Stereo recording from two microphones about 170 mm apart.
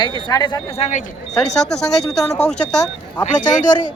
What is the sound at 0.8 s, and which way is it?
Speech, 40° left (ahead or behind).